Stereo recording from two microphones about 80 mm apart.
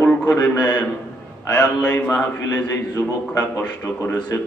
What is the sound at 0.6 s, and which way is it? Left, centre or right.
A man's voice, centre.